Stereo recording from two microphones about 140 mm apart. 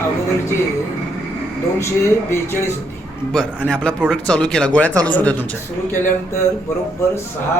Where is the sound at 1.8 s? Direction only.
20° left (ahead or behind).